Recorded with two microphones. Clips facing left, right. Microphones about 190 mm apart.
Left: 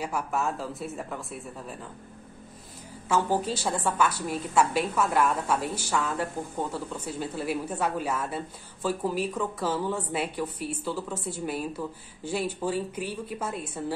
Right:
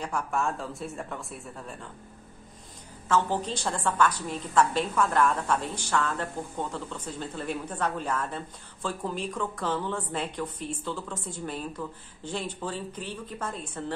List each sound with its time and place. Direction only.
0.0 s speech: 5° left (ahead or behind)
3.1 s speech: 10° left (ahead or behind)